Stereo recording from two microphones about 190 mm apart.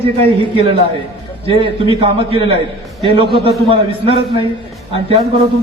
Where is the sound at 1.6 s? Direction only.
25° right (ahead or behind).